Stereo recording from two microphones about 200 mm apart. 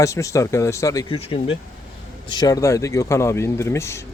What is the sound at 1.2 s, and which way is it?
Speech, 30° left (ahead or behind).